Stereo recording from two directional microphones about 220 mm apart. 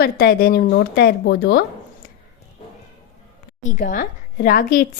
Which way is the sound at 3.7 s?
35° left (ahead or behind).